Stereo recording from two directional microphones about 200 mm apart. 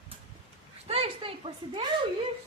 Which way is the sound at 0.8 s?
30° right (ahead or behind).